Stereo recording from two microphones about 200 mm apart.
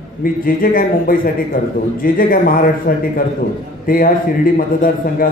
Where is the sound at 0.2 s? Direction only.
45° left (ahead or behind).